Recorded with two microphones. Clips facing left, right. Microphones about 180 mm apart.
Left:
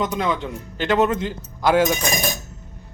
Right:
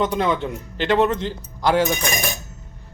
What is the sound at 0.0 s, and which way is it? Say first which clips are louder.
Speech: right 2 dB; centre (ahead or behind).